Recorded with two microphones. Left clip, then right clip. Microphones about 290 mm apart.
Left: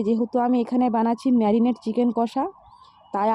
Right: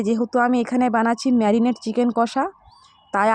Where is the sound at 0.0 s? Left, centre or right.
Right.